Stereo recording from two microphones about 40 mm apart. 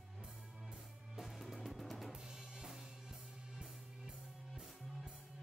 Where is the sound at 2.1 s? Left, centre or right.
Centre.